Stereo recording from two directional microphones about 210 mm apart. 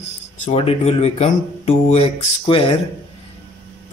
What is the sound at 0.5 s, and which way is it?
Speech, 30° left (ahead or behind).